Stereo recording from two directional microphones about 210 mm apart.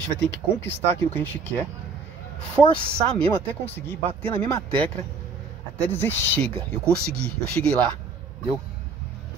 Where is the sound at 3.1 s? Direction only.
10° left (ahead or behind).